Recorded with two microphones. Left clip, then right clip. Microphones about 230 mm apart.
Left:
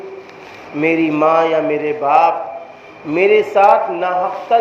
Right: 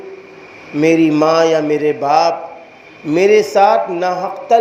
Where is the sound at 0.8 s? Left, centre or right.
Right.